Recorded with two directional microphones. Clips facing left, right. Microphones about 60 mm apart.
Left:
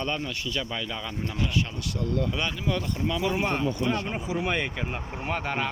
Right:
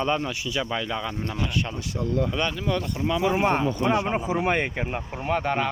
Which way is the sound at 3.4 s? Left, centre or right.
Right.